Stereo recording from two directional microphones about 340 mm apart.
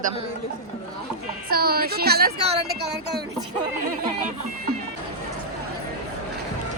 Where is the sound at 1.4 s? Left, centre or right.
Right.